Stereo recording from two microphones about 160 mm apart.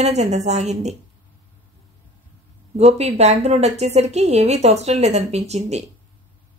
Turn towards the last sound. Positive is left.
turn(degrees=-45)  # may be behind; listen again after turning